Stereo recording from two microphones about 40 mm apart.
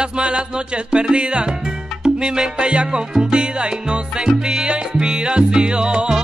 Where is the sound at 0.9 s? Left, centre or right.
Right.